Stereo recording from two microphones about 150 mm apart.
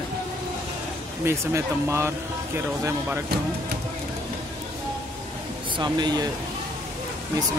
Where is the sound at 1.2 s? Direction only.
20° right (ahead or behind).